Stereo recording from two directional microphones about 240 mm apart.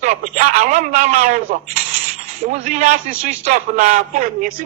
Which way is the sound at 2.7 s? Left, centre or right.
Right.